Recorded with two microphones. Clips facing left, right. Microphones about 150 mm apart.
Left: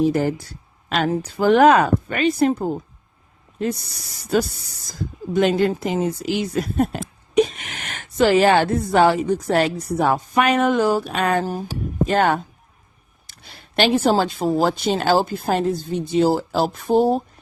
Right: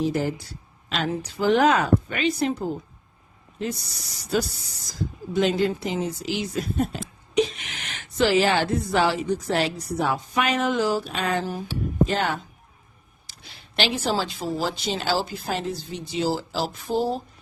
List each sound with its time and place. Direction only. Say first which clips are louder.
0.0 s a woman's voice: left 6 dB; 55° left (ahead or behind)
4.2 s a woman's voice: left 5 dB; 50° left (ahead or behind)